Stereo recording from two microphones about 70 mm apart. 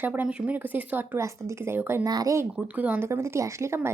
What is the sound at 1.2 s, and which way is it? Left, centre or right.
Speech, right.